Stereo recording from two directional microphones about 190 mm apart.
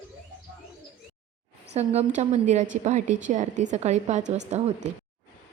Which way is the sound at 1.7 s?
35° right (ahead or behind).